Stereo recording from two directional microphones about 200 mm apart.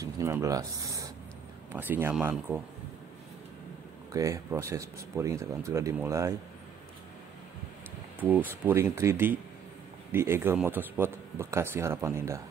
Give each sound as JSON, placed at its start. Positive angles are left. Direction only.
{"t": 0.0, "sound": "a sound", "side_deg": -15}
{"t": 1.7, "sound": "a man's voice", "side_deg": -10}
{"t": 4.1, "sound": "a man's voice", "side_deg": -15}
{"t": 8.2, "sound": "a man's voice", "side_deg": -10}